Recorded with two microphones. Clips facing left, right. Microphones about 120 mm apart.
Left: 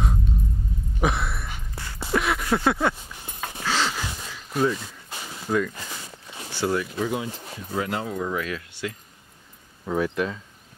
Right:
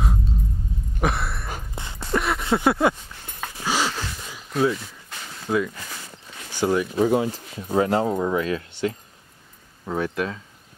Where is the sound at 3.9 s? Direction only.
15° left (ahead or behind).